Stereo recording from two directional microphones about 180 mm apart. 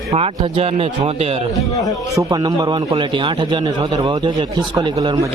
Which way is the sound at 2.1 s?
20° right (ahead or behind).